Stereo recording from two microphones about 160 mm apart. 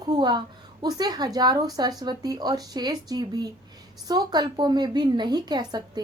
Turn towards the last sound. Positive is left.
turn(degrees=-25)  # may be behind; listen again after turning